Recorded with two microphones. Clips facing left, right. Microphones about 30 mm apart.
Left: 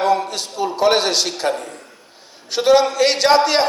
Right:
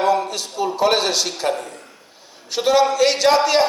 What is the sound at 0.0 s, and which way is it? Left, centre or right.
A man's voice, left.